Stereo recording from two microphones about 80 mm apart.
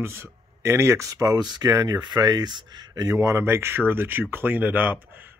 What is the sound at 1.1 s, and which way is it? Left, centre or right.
Speech, right.